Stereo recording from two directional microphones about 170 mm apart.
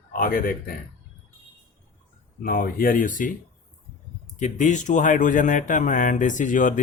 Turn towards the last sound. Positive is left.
turn(degrees=50)  # may be behind; listen again after turning